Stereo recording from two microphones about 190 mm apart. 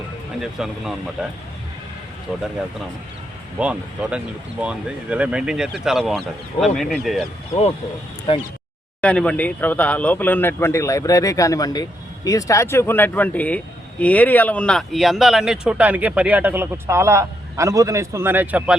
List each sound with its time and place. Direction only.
0.6 s speech: 5° right (ahead or behind)
3.6 s speech: 5° right (ahead or behind)
8.3 s speech: 30° left (ahead or behind)
9.0 s speech: 5° left (ahead or behind)